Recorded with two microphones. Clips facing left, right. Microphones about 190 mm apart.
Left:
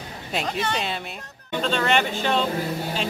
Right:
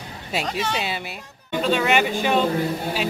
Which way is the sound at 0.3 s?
Centre (ahead or behind).